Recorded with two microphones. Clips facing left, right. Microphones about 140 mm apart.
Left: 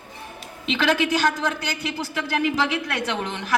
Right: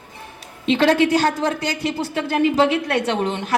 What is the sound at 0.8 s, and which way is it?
Speech, 35° right (ahead or behind).